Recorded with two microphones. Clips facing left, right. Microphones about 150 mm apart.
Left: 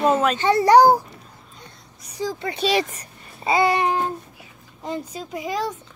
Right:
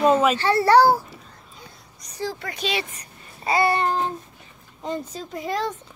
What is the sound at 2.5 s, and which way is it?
Speech, 35° left (ahead or behind).